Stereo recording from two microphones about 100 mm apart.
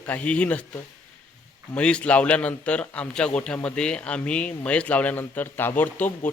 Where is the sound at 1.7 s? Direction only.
10° left (ahead or behind).